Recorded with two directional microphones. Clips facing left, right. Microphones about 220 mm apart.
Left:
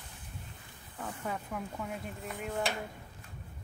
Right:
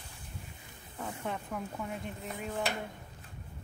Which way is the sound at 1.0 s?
Centre (ahead or behind).